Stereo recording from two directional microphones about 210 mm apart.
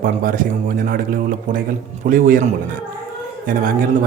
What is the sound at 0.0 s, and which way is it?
A man's voice, 40° right (ahead or behind).